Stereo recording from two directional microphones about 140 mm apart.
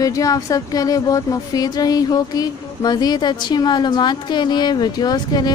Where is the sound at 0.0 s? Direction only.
25° left (ahead or behind).